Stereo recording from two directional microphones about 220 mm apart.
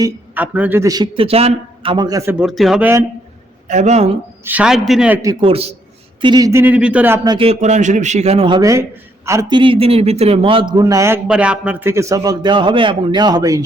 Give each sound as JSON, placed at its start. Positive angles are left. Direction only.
{"t": 0.0, "sound": "a man's voice", "side_deg": -5}
{"t": 2.4, "sound": "speech", "side_deg": 0}
{"t": 3.7, "sound": "a man's voice", "side_deg": -30}
{"t": 4.4, "sound": "a man's voice", "side_deg": -5}
{"t": 7.3, "sound": "a man's voice", "side_deg": -25}